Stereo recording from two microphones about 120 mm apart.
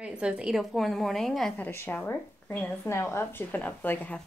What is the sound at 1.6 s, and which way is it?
A woman's voice, 20° left (ahead or behind).